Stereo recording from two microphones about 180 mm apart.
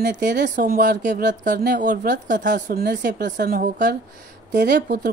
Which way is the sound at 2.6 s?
60° right (ahead or behind).